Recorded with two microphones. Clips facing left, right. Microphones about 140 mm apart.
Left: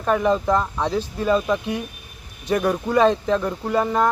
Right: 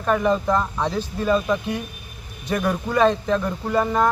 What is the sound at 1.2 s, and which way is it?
Speech, 15° left (ahead or behind).